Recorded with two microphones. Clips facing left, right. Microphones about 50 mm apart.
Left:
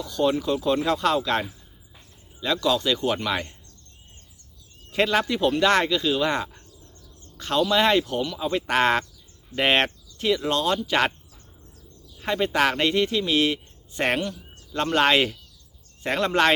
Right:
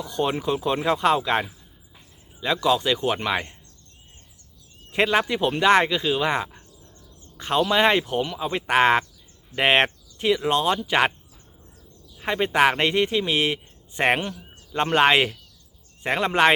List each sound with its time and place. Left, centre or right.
0.0 s a man's voice: right
4.9 s a man's voice: centre
12.2 s a man's voice: centre